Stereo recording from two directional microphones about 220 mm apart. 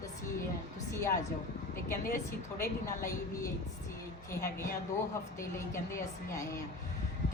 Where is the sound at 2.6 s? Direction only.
15° left (ahead or behind).